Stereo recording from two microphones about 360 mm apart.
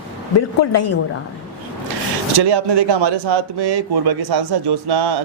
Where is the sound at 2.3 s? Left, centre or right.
Right.